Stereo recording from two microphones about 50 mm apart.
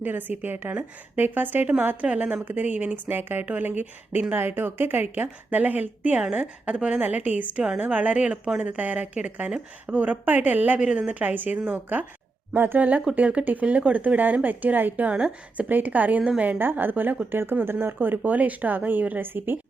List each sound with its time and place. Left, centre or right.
0.0 s speech: right
3.1 s a woman's voice: right
7.0 s a woman's voice: right
10.8 s a woman's voice: right
12.5 s speech: right
13.1 s speech: right
15.1 s a woman's voice: right
15.7 s speech: right